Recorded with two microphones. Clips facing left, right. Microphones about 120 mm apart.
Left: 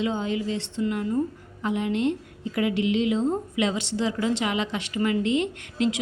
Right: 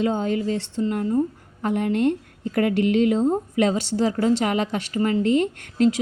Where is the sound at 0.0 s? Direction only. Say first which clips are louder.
Right 4 dB; 45° right (ahead or behind).